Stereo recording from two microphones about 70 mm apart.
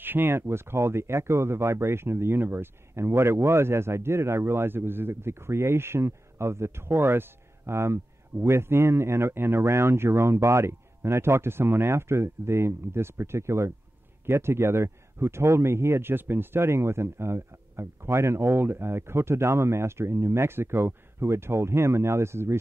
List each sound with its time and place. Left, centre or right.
0.0 s speech: right